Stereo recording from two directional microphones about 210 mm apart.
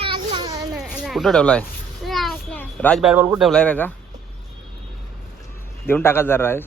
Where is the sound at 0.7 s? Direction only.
Centre (ahead or behind).